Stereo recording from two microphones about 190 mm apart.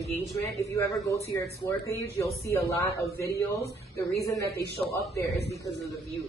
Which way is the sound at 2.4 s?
15° left (ahead or behind).